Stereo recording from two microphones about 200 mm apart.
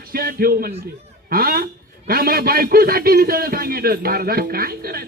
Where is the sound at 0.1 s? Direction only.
50° right (ahead or behind).